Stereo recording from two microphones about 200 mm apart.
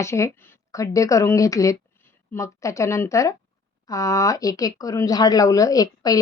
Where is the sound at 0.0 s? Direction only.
15° left (ahead or behind).